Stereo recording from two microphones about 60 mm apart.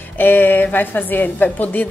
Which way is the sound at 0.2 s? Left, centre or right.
Left.